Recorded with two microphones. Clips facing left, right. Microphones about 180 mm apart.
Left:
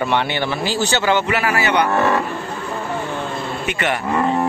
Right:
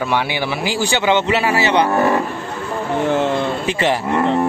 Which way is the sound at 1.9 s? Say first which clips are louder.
Right 2 dB; 15° right (ahead or behind).